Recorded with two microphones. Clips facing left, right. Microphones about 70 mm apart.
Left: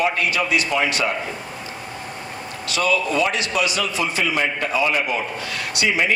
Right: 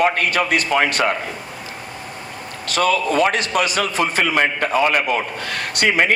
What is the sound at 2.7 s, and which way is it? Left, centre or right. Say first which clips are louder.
A man's voice: right 3 dB; right.